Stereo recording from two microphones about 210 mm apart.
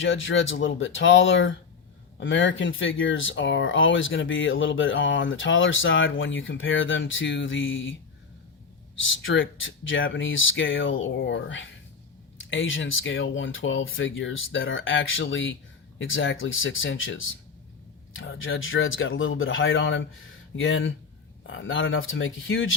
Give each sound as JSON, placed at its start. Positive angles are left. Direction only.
{"t": 0.0, "sound": "speech", "side_deg": 65}
{"t": 9.0, "sound": "speech", "side_deg": 65}